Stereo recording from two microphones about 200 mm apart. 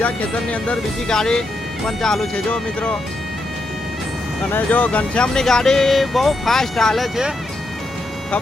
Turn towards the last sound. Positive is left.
turn(degrees=0)  # may be behind; listen again after turning